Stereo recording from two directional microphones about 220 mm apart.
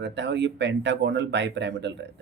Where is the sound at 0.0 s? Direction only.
55° right (ahead or behind).